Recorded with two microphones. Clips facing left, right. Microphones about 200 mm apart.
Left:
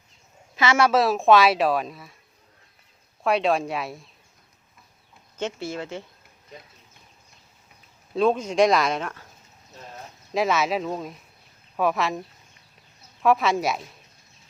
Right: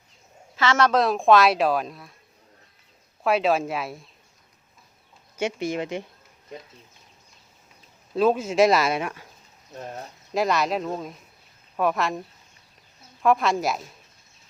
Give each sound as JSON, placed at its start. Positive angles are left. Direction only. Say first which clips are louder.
{"t": 0.5, "sound": "speech", "louder": "left 1 dB", "side_deg": 10}
{"t": 3.2, "sound": "speech", "louder": "even", "side_deg": 0}
{"t": 5.4, "sound": "speech", "louder": "right 3 dB", "side_deg": -15}
{"t": 8.1, "sound": "speech", "louder": "right 1 dB", "side_deg": -5}
{"t": 10.3, "sound": "speech", "louder": "even", "side_deg": 0}
{"t": 13.2, "sound": "speech", "louder": "even", "side_deg": 0}